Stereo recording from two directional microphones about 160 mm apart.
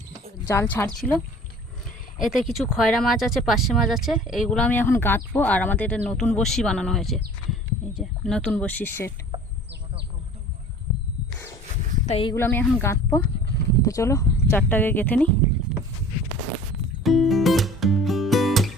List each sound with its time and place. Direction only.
0.4 s speech: 15° left (ahead or behind)
2.1 s speech: centre (ahead or behind)
9.3 s chicken: 30° right (ahead or behind)
12.0 s speech: 40° left (ahead or behind)
12.3 s speech: 15° left (ahead or behind)
17.0 s music: centre (ahead or behind)